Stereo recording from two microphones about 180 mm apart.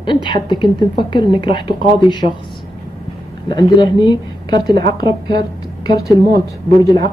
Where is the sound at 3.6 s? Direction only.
25° left (ahead or behind).